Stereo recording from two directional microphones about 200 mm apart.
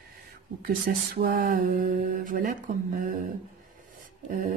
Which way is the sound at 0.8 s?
45° right (ahead or behind).